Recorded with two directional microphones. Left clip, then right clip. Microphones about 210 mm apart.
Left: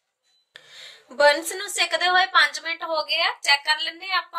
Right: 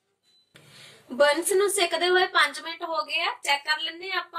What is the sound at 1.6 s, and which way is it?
A woman's voice, 45° left (ahead or behind).